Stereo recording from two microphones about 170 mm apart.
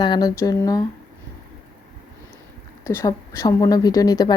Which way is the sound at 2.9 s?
20° left (ahead or behind).